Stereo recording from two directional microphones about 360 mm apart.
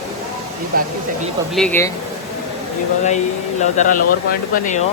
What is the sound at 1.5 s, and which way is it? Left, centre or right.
Speech, centre.